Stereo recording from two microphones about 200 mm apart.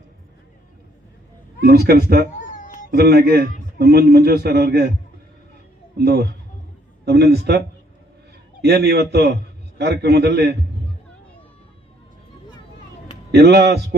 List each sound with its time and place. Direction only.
1.6 s a man's voice: 50° right (ahead or behind)
2.2 s a sound: 40° left (ahead or behind)
2.9 s a man's voice: 55° right (ahead or behind)
6.0 s a man's voice: 55° right (ahead or behind)
8.6 s a man's voice: 55° right (ahead or behind)
13.3 s a man's voice: 55° right (ahead or behind)